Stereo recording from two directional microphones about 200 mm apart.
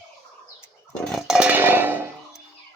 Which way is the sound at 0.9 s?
Centre (ahead or behind).